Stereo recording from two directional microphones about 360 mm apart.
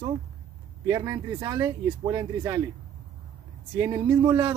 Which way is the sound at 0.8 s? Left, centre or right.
Centre.